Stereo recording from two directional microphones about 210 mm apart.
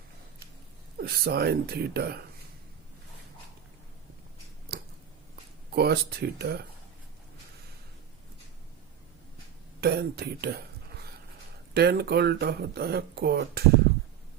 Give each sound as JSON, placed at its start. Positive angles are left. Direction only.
{"t": 0.9, "sound": "speech", "side_deg": -50}
{"t": 4.7, "sound": "a sound", "side_deg": -50}
{"t": 5.7, "sound": "speech", "side_deg": -50}
{"t": 9.8, "sound": "speech", "side_deg": -50}
{"t": 11.7, "sound": "speech", "side_deg": -50}